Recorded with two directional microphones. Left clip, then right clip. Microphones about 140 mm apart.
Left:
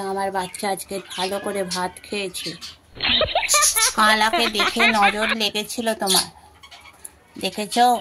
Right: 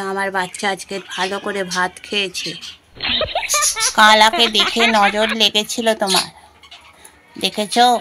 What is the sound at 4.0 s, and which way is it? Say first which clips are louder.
Speech: right 8 dB; 30° right (ahead or behind).